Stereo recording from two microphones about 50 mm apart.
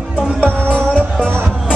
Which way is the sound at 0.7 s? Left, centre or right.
Left.